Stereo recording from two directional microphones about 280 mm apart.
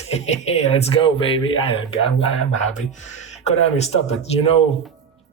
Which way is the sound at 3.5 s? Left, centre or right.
Left.